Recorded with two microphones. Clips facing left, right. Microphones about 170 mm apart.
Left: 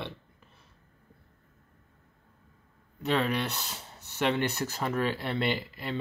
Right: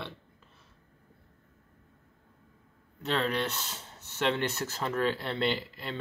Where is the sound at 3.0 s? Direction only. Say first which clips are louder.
Left 2 dB; 10° left (ahead or behind).